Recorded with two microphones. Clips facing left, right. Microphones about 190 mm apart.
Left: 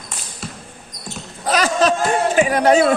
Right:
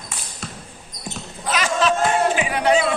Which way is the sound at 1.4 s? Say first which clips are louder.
Left 4 dB; 40° left (ahead or behind).